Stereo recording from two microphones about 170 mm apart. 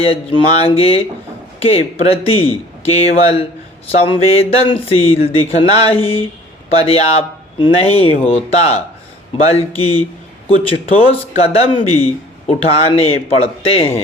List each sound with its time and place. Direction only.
0.0 s a man's voice: 35° left (ahead or behind)